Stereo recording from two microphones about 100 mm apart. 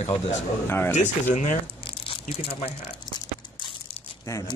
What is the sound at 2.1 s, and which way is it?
Speech, 75° left (ahead or behind).